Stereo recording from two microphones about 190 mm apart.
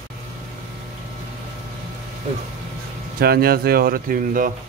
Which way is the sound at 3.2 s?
55° right (ahead or behind).